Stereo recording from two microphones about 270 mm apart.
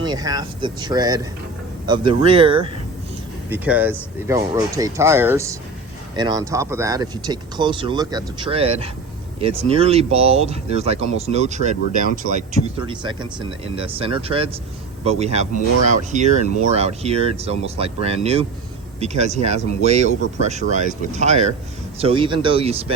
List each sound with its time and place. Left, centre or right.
0.0 s speech: centre
3.5 s speech: centre; by 22.9 s right